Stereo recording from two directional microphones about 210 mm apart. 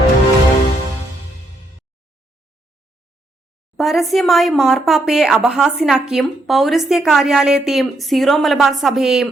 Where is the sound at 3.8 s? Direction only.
Centre (ahead or behind).